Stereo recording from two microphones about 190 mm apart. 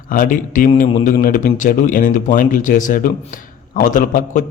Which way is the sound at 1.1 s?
45° left (ahead or behind).